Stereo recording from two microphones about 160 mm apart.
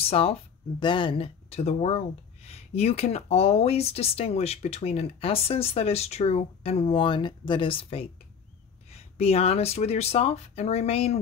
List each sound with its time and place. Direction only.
0.0 s speech: 35° left (ahead or behind)